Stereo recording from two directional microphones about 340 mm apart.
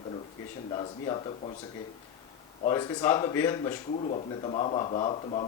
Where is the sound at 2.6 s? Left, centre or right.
Centre.